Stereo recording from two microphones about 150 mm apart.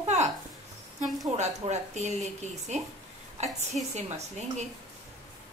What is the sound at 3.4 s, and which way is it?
A woman's voice, 45° right (ahead or behind).